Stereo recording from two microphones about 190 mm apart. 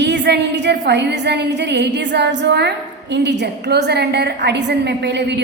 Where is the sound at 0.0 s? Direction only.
65° right (ahead or behind).